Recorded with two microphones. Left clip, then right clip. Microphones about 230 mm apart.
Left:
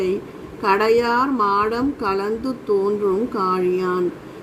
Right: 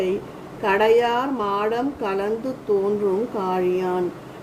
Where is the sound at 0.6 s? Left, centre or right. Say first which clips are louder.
Left 1 dB; left.